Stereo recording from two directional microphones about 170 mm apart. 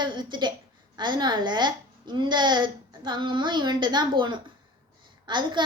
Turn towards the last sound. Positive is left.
turn(degrees=-25)  # may be behind; listen again after turning